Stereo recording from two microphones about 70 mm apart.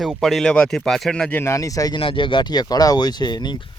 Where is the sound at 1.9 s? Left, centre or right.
Left.